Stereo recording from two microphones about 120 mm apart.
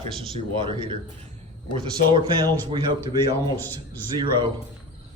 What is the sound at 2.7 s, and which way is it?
Speech, 40° right (ahead or behind).